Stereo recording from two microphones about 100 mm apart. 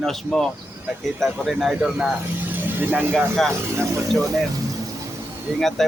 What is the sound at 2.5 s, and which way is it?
Vehicle, 20° right (ahead or behind).